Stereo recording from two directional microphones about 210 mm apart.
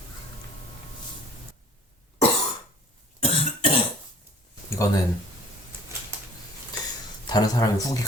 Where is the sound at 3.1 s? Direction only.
25° left (ahead or behind).